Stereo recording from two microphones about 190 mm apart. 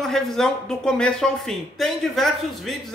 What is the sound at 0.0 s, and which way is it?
Speech, centre (ahead or behind).